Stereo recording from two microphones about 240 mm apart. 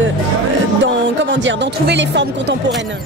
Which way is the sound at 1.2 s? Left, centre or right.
Right.